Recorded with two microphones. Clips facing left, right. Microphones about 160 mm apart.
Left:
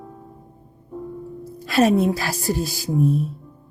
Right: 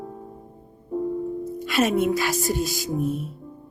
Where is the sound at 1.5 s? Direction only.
35° left (ahead or behind).